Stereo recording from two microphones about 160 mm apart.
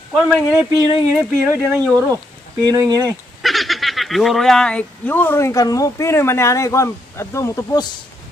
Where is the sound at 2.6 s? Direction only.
25° right (ahead or behind).